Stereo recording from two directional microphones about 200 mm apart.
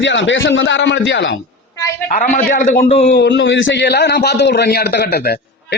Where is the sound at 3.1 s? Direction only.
60° left (ahead or behind).